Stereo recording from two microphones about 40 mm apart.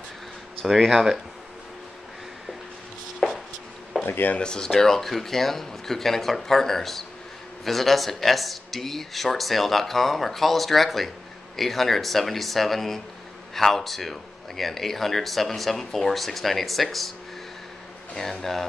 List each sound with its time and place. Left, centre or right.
0.9 s speech: centre
3.2 s a sound: centre
4.0 s speech: left
4.4 s speech: centre
4.6 s speech: centre
18.1 s speech: centre